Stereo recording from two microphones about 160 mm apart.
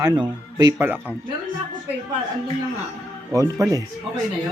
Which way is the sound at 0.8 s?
10° right (ahead or behind).